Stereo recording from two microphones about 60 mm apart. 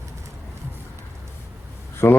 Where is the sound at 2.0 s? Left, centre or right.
Left.